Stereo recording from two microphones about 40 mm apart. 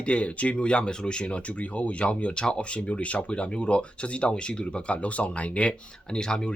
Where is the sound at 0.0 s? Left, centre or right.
Left.